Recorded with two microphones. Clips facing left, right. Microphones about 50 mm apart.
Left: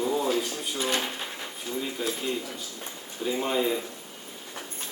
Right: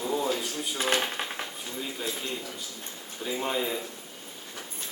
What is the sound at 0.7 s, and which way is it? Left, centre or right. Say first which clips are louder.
Speech: right 1 dB; right.